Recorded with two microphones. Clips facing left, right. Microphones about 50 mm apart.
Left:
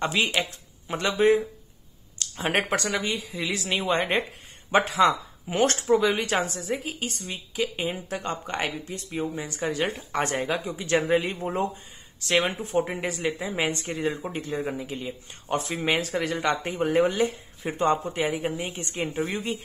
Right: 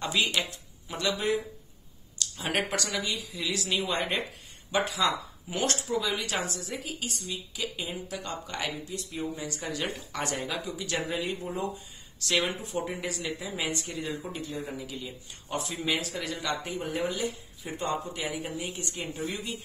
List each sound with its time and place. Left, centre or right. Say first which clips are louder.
0.0 s speech: left 3 dB; left
12.2 s speech: left 4 dB; left